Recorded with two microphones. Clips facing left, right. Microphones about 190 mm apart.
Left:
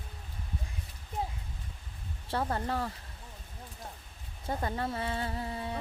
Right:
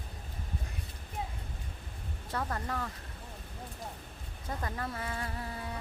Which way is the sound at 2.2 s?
30° left (ahead or behind).